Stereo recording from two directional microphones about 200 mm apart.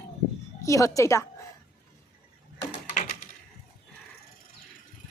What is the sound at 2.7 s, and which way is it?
Typing, 35° left (ahead or behind).